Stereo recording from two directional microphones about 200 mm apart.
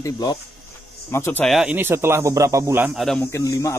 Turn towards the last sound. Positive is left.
turn(degrees=15)  # may be behind; listen again after turning